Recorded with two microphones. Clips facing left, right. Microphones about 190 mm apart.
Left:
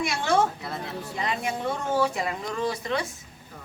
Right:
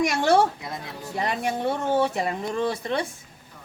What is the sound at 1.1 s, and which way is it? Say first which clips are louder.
Speech: right 4 dB; 40° right (ahead or behind).